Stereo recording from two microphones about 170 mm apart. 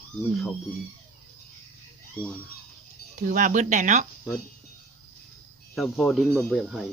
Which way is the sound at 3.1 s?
50° right (ahead or behind).